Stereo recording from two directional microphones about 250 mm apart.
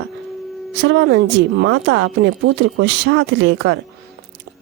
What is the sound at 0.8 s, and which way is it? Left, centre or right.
A woman's voice, right.